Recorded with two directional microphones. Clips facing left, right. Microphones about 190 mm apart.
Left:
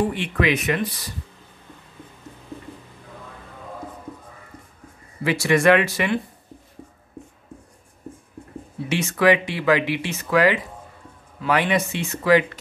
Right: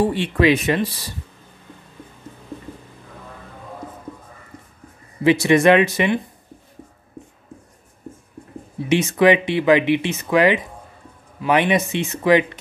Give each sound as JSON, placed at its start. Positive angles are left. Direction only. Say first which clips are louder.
{"t": 0.0, "sound": "speech", "louder": "right 5 dB", "side_deg": -30}
{"t": 5.2, "sound": "speech", "louder": "right 4 dB", "side_deg": -20}
{"t": 8.8, "sound": "speech", "louder": "right 4 dB", "side_deg": -20}